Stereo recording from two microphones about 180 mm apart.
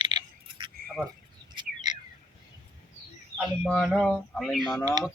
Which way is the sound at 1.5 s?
25° right (ahead or behind).